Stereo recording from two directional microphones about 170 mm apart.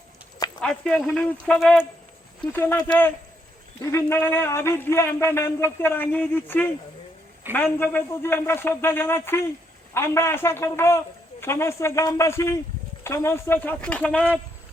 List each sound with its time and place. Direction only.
0.6 s a man's voice: 5° left (ahead or behind)